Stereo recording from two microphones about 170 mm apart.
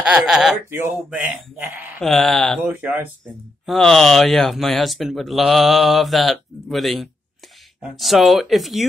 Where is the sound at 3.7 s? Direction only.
Centre (ahead or behind).